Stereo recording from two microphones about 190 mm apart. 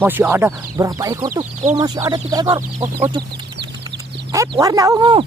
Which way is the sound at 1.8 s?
20° right (ahead or behind).